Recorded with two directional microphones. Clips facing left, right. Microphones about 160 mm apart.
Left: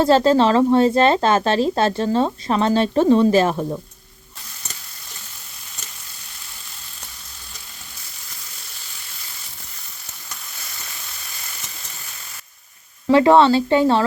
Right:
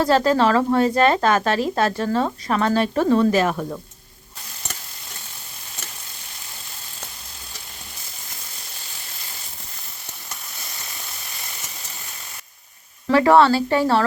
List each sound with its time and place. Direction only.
0.0 s a woman's voice: 25° left (ahead or behind)
13.1 s a woman's voice: 20° left (ahead or behind)